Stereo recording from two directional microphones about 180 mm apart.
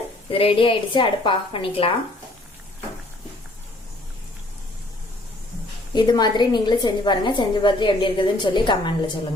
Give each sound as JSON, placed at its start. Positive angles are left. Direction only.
{"t": 0.3, "sound": "a woman's voice", "side_deg": 30}
{"t": 5.9, "sound": "a woman's voice", "side_deg": 25}